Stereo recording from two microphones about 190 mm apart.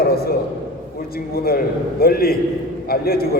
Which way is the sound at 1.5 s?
55° left (ahead or behind).